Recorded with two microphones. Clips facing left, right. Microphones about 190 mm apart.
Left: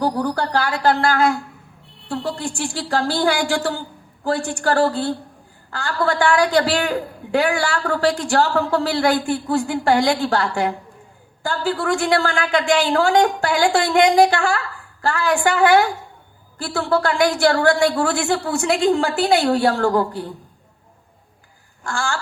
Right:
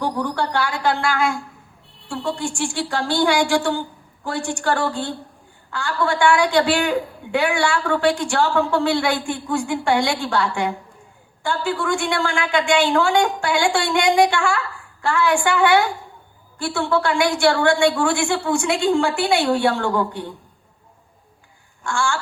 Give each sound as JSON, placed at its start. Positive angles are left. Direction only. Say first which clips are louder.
{"t": 0.0, "sound": "a woman's voice", "louder": "left 2 dB", "side_deg": 40}
{"t": 2.0, "sound": "a sound", "louder": "even", "side_deg": 35}
{"t": 2.6, "sound": "a woman's voice", "louder": "left 1 dB", "side_deg": 40}
{"t": 21.8, "sound": "a woman's voice", "louder": "right 2 dB", "side_deg": 35}